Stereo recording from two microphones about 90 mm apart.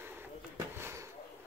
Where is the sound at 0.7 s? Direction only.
30° right (ahead or behind).